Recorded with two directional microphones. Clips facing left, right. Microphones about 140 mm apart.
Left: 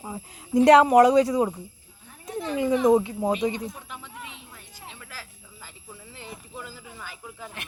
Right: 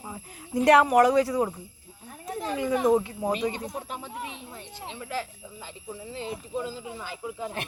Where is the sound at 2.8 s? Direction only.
20° left (ahead or behind).